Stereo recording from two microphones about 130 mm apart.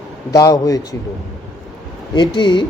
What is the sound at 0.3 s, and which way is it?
Speech, 25° left (ahead or behind).